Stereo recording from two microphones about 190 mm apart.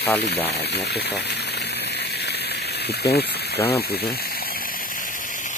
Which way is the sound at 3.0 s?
60° left (ahead or behind).